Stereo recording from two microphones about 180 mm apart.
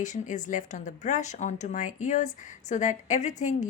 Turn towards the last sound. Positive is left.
turn(degrees=45)  # may be behind; listen again after turning